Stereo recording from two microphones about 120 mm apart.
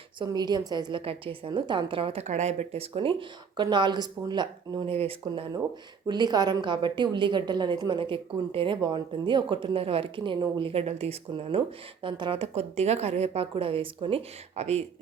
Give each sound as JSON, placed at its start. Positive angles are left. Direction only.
{"t": 0.2, "sound": "speech", "side_deg": -35}
{"t": 2.2, "sound": "speech", "side_deg": -70}
{"t": 4.9, "sound": "speech", "side_deg": -55}
{"t": 6.1, "sound": "a woman's voice", "side_deg": -35}
{"t": 12.0, "sound": "speech", "side_deg": -40}
{"t": 12.4, "sound": "a woman's voice", "side_deg": -60}